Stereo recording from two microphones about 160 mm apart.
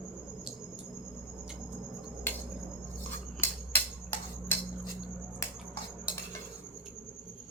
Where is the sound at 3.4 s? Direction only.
15° left (ahead or behind).